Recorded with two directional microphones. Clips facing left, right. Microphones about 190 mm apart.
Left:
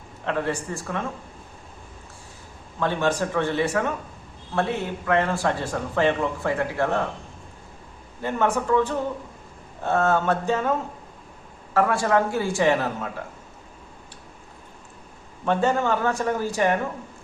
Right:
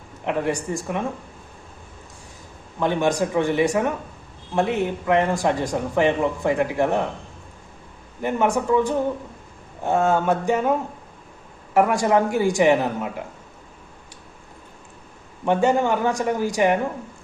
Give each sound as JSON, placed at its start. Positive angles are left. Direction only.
{"t": 0.3, "sound": "speech", "side_deg": -15}
{"t": 2.8, "sound": "speech", "side_deg": -15}
{"t": 8.2, "sound": "speech", "side_deg": -15}
{"t": 15.4, "sound": "speech", "side_deg": -15}